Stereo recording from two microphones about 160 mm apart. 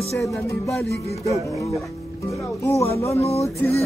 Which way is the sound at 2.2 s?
20° left (ahead or behind).